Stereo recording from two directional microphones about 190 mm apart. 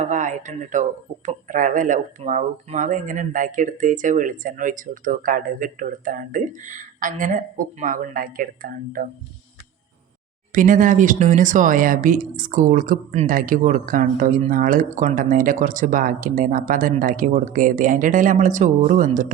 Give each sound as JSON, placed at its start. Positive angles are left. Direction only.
{"t": 0.0, "sound": "speech", "side_deg": -40}
{"t": 10.5, "sound": "speech", "side_deg": -45}